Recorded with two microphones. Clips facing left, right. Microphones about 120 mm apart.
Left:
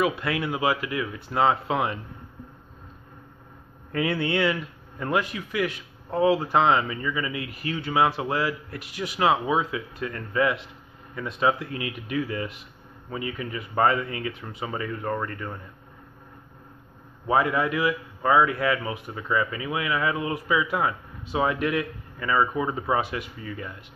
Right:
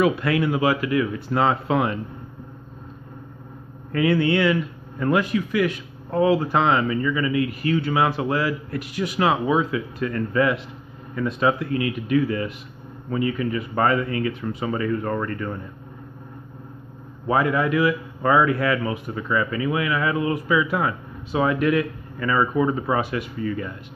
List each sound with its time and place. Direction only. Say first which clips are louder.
0.0 s speech: right 5 dB; 15° left (ahead or behind)
4.2 s speech: right 5 dB; 25° left (ahead or behind); by 15.5 s 10° left (ahead or behind)
17.3 s speech: right 2 dB; 20° left (ahead or behind)
22.3 s speech: right 3 dB; 10° left (ahead or behind)